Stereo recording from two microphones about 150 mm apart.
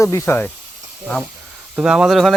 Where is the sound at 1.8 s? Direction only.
5° right (ahead or behind).